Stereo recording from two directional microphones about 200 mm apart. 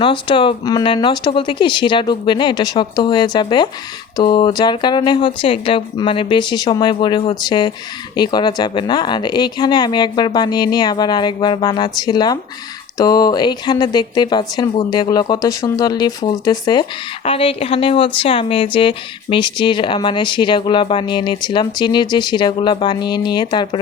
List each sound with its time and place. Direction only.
0.0 s speech: 25° left (ahead or behind)